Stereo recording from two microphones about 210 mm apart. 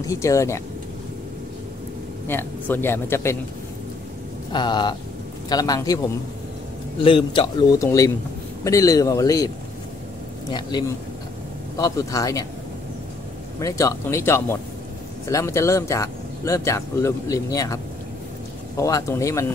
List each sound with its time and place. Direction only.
0.0 s speech: 15° left (ahead or behind)
2.2 s speech: 10° left (ahead or behind)
4.5 s a man's voice: 20° left (ahead or behind)
7.0 s a man's voice: 25° left (ahead or behind)
10.5 s a man's voice: 20° left (ahead or behind)
13.6 s speech: 15° left (ahead or behind)
18.8 s speech: 15° left (ahead or behind)